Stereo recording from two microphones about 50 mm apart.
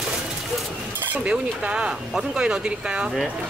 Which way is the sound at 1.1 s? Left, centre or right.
Right.